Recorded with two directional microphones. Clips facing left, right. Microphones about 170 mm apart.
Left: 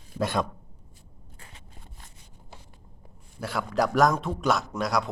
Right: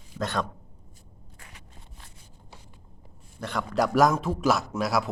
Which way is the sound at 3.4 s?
5° left (ahead or behind).